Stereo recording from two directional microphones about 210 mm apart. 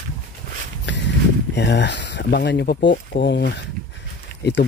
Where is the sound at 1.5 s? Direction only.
55° left (ahead or behind).